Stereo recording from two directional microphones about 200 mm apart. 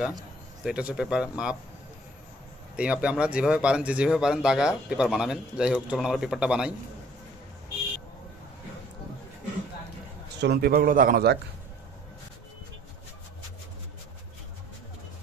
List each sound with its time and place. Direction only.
0.7 s speech: 5° right (ahead or behind)
2.7 s speech: 5° right (ahead or behind)
10.4 s speech: 50° right (ahead or behind)